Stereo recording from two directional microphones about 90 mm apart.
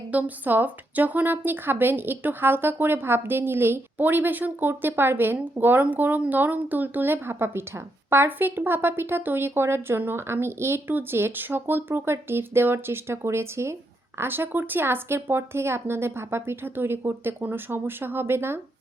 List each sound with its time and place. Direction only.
0.1 s speech: 20° right (ahead or behind)